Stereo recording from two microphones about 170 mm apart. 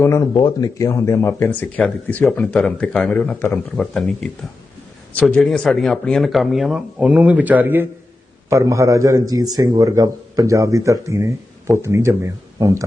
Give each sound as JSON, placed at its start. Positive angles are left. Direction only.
{"t": 0.0, "sound": "a man's voice", "side_deg": 15}